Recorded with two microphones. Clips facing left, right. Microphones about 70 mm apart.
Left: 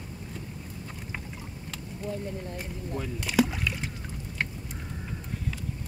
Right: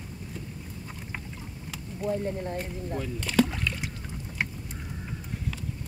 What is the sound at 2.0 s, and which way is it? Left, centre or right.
Speech, right.